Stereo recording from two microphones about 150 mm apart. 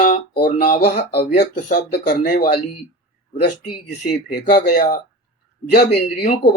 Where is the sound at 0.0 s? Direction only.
60° left (ahead or behind).